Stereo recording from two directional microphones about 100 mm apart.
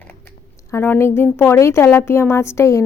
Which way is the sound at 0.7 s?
25° left (ahead or behind).